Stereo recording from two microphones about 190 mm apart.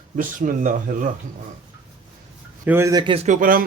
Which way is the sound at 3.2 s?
45° right (ahead or behind).